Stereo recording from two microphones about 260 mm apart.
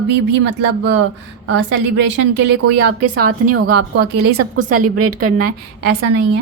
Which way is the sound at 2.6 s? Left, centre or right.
Right.